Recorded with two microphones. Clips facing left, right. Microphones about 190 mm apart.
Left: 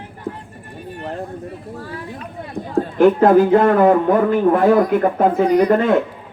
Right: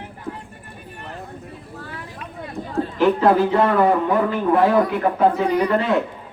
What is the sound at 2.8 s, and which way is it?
A man's voice, 50° left (ahead or behind).